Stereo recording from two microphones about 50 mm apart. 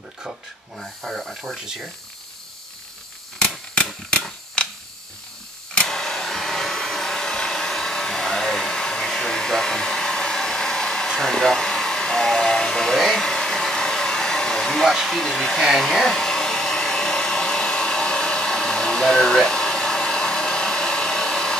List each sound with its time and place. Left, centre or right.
0.7 s speech: centre
3.3 s camera: centre
5.9 s hair dryer: centre